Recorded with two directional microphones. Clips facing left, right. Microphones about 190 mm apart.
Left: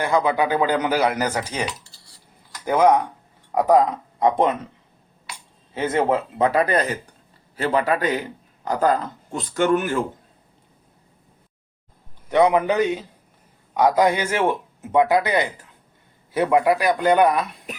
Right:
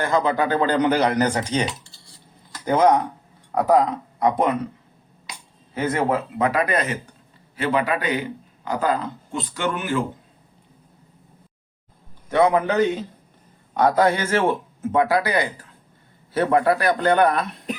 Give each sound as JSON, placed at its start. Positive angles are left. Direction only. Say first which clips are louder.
{"t": 0.0, "sound": "speech", "louder": "left 1 dB", "side_deg": 10}
{"t": 2.6, "sound": "speech", "louder": "even", "side_deg": 10}
{"t": 5.7, "sound": "a man's voice", "louder": "left 1 dB", "side_deg": 25}
{"t": 12.3, "sound": "speech", "louder": "left 1 dB", "side_deg": 15}